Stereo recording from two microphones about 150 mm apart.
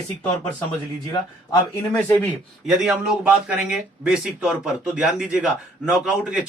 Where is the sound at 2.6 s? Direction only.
5° right (ahead or behind).